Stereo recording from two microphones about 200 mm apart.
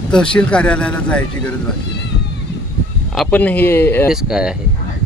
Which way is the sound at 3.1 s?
10° left (ahead or behind).